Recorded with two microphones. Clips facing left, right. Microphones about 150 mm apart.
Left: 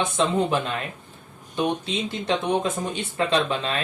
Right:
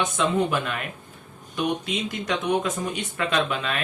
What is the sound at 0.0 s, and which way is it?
Speech, 30° left (ahead or behind).